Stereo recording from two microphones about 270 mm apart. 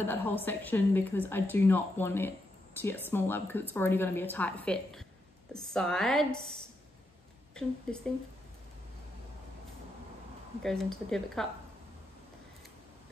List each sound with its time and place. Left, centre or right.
0.1 s a woman's voice: centre
7.5 s speech: centre
10.6 s speech: centre